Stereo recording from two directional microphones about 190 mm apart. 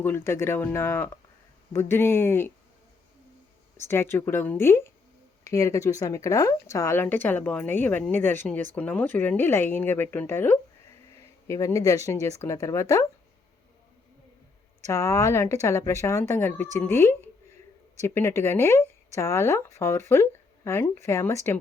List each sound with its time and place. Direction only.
0.0 s speech: 10° left (ahead or behind)
3.8 s speech: 10° left (ahead or behind)
14.8 s speech: 15° left (ahead or behind)